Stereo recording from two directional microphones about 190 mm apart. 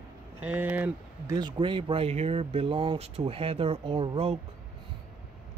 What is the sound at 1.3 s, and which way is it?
Speech, 25° right (ahead or behind).